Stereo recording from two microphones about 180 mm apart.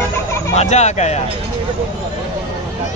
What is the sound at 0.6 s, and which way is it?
Speech, 40° left (ahead or behind).